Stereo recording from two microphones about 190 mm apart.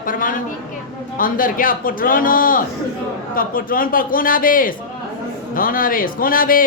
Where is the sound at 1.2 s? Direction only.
45° left (ahead or behind).